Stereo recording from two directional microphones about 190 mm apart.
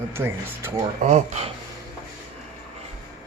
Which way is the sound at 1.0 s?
35° right (ahead or behind).